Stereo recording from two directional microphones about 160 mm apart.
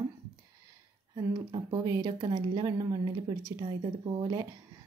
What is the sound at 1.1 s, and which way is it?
Speech, 30° right (ahead or behind).